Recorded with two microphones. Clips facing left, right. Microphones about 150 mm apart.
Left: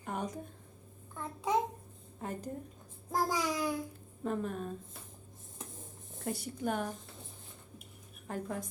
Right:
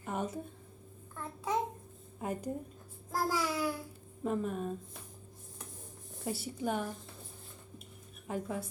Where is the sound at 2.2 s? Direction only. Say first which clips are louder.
Right 3 dB; 10° right (ahead or behind).